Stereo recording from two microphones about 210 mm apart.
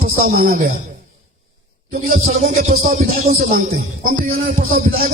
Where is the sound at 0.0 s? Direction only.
40° right (ahead or behind).